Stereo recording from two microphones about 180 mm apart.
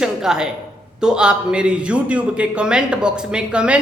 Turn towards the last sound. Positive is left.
turn(degrees=-5)  # may be behind; listen again after turning